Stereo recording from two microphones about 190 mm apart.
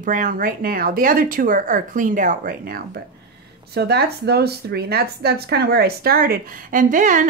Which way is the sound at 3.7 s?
60° right (ahead or behind).